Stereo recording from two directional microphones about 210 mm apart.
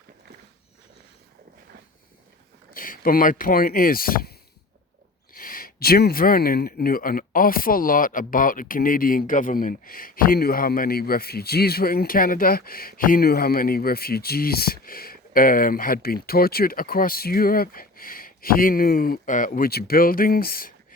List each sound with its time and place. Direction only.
2.7 s speech: 40° left (ahead or behind)